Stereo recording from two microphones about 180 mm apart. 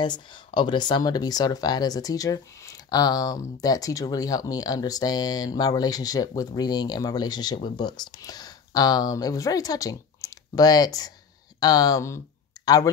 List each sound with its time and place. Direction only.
0.6 s speech: 25° left (ahead or behind)